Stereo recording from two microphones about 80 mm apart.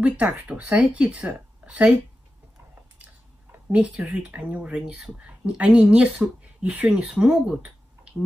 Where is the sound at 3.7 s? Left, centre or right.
Centre.